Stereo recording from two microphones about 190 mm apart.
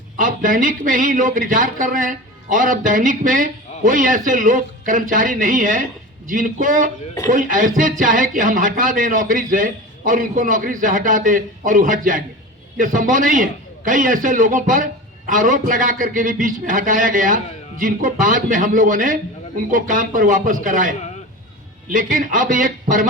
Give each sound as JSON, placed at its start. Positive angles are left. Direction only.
{"t": 0.2, "sound": "speech", "side_deg": -45}